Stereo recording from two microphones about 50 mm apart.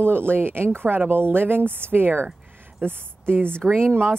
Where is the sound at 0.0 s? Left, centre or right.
Right.